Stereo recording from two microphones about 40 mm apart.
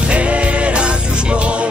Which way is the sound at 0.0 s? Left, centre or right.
Right.